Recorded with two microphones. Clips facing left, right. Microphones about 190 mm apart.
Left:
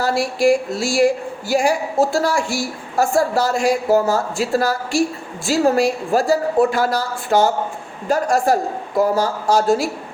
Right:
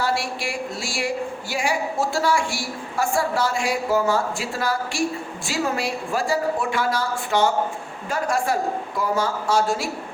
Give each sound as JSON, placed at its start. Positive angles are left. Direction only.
{"t": 0.0, "sound": "a woman's voice", "side_deg": 40}